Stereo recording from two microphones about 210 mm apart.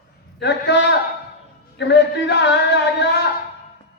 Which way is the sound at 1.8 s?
55° left (ahead or behind).